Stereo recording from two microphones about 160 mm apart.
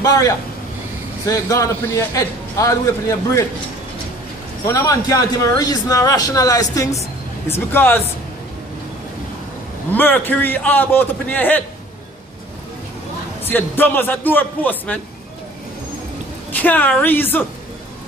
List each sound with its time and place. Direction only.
0.0 s a man's voice: 20° left (ahead or behind)
4.6 s a man's voice: 20° left (ahead or behind)
9.9 s a man's voice: 10° left (ahead or behind)
13.5 s a man's voice: 10° left (ahead or behind)
16.6 s a man's voice: 10° left (ahead or behind)